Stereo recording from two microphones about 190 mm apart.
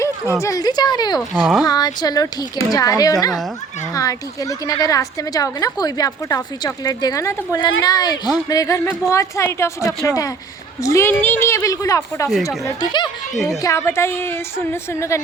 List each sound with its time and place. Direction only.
0.4 s a woman's voice: 20° left (ahead or behind)
1.3 s speech: centre (ahead or behind)
1.6 s a woman's voice: 20° left (ahead or behind)
13.3 s speech: centre (ahead or behind)
13.6 s a woman's voice: 15° left (ahead or behind)